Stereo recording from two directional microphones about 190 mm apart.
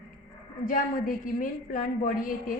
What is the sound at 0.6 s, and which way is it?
A woman's voice, 45° left (ahead or behind).